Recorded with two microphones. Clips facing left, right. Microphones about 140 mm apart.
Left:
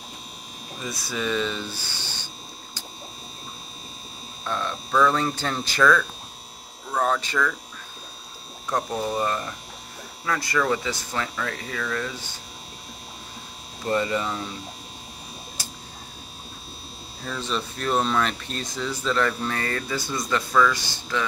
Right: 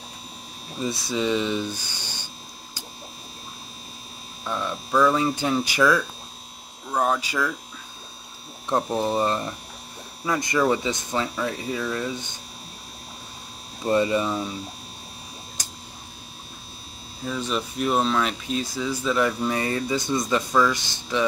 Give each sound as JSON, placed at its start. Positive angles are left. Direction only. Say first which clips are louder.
{"t": 1.1, "sound": "speech", "louder": "right 2 dB", "side_deg": -20}
{"t": 4.5, "sound": "speech", "louder": "even", "side_deg": -10}
{"t": 8.6, "sound": "speech", "louder": "right 3 dB", "side_deg": -25}
{"t": 13.8, "sound": "speech", "louder": "right 3 dB", "side_deg": -20}
{"t": 17.2, "sound": "speech", "louder": "right 2 dB", "side_deg": -10}